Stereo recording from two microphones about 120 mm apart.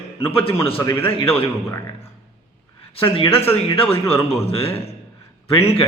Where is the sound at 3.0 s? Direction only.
50° left (ahead or behind).